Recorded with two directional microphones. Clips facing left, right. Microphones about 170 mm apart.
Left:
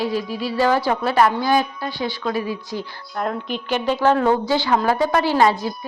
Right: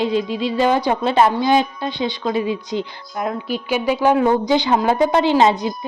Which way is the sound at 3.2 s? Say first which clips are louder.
Right 2 dB; 5° right (ahead or behind).